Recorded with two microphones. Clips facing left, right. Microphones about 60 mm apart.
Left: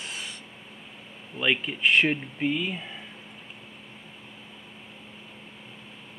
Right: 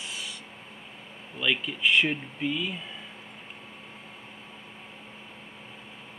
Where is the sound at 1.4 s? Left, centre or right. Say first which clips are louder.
Left 2 dB; left.